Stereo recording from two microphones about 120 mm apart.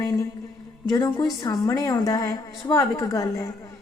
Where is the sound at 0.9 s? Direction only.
30° left (ahead or behind).